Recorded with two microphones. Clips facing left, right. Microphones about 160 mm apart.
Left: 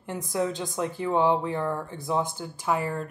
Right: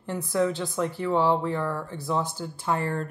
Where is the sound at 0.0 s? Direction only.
15° left (ahead or behind).